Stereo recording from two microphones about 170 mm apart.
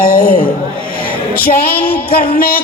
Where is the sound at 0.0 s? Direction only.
60° left (ahead or behind).